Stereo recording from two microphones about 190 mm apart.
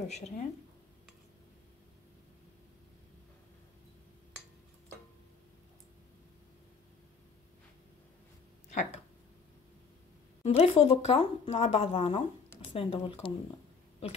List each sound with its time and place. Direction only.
0.1 s speech: 35° left (ahead or behind)
8.6 s a sound: 35° left (ahead or behind)
10.4 s speech: 30° left (ahead or behind)